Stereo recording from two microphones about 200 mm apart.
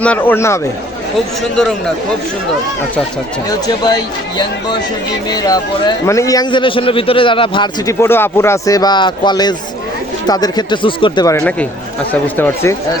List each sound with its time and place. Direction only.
0.0 s speech: 10° left (ahead or behind)
3.5 s a man's voice: 20° left (ahead or behind)
8.0 s a man's voice: 10° left (ahead or behind)